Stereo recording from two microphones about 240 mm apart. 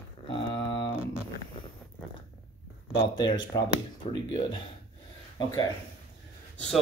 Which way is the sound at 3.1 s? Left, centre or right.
Centre.